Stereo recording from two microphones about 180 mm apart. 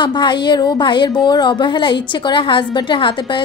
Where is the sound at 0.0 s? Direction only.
25° left (ahead or behind).